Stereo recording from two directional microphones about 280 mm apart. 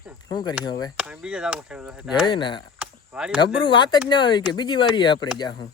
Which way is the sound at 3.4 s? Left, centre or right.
Centre.